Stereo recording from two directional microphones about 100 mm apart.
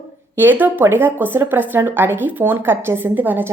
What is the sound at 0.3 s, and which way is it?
A woman's voice, 20° right (ahead or behind).